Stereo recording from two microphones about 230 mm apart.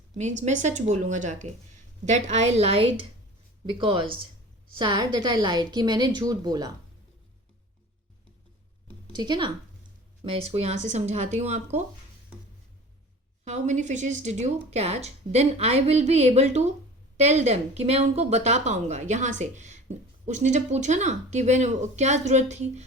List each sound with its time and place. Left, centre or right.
0.2 s a woman's voice: right
9.1 s speech: centre
13.4 s speech: right